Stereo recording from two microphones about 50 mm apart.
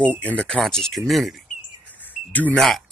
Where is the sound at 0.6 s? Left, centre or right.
Centre.